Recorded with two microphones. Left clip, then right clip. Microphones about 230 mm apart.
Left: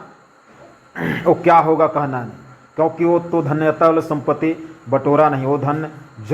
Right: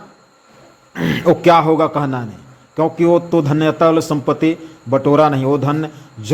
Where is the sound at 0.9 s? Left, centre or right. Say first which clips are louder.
Right 2 dB; right.